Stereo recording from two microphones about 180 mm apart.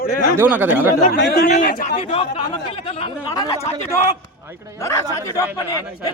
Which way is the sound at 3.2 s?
20° left (ahead or behind).